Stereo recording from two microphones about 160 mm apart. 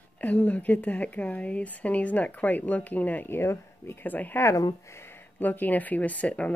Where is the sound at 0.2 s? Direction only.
10° left (ahead or behind).